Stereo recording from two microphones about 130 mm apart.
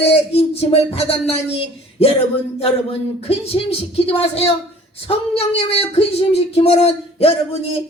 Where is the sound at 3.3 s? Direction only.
50° left (ahead or behind).